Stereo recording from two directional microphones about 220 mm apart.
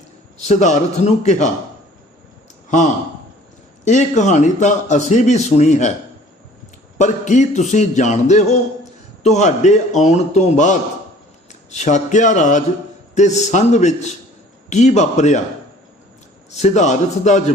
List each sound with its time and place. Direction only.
0.4 s speech: 30° left (ahead or behind)
3.8 s speech: 35° left (ahead or behind)
7.0 s speech: 35° left (ahead or behind)
16.6 s speech: 30° left (ahead or behind)